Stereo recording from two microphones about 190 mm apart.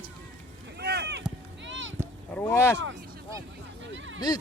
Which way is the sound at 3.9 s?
80° right.